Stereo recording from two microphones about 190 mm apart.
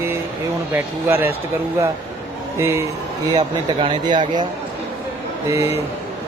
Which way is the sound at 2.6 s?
15° right (ahead or behind).